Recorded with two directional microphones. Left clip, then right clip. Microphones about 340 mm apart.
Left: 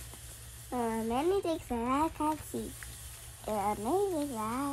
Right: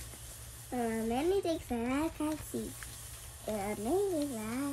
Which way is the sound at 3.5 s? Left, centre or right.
Centre.